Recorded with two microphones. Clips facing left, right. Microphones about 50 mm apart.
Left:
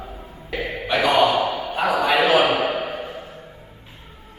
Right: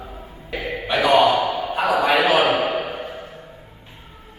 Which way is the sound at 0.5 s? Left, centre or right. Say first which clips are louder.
Even; centre.